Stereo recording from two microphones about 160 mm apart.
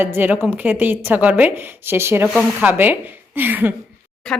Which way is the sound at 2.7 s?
10° right (ahead or behind).